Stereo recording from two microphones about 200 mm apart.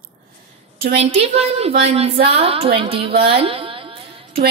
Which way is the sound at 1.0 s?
30° right (ahead or behind).